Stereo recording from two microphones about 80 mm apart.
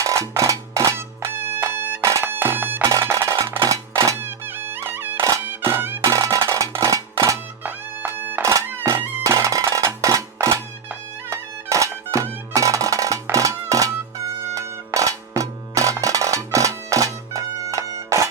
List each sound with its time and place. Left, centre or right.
0.0 s music: right
2.2 s bagpipes: right
2.9 s percussion: right
3.7 s music: right
4.2 s music: right
6.1 s music: right
7.6 s music: right
9.2 s music: right
11.3 s music: right